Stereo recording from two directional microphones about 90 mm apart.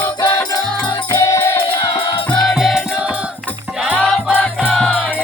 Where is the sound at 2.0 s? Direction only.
75° left (ahead or behind).